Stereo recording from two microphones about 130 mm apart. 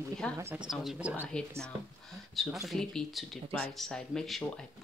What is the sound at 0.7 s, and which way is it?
Speech, centre (ahead or behind).